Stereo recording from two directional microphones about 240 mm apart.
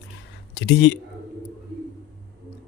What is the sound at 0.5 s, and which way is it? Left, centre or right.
Speech, left.